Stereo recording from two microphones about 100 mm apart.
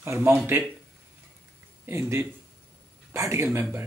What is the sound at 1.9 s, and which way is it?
Speech, 25° right (ahead or behind).